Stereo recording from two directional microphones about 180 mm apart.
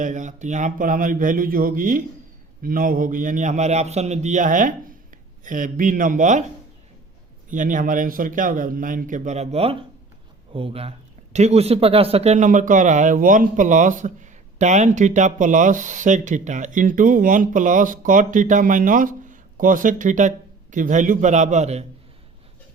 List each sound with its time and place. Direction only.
0.0 s speech: 45° right (ahead or behind)
7.5 s speech: 45° right (ahead or behind)